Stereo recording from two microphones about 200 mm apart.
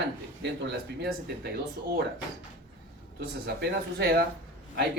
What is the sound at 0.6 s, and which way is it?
Speech, 55° right (ahead or behind).